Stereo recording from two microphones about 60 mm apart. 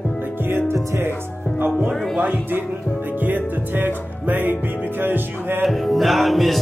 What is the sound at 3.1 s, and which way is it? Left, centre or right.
Music, right.